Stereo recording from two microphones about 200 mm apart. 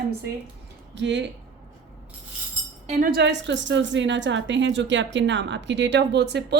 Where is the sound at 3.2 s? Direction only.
60° right (ahead or behind).